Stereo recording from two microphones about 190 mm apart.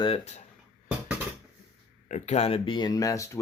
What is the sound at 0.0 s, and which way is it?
Speech, 30° left (ahead or behind).